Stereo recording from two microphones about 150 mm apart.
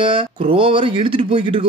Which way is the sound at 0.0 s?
35° right (ahead or behind).